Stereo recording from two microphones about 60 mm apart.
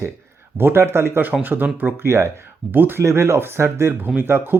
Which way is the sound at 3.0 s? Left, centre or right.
Right.